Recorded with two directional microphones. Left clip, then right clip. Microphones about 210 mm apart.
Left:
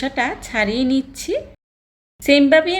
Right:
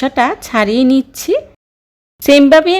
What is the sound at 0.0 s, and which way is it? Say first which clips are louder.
Speech: right 8 dB; 40° right (ahead or behind).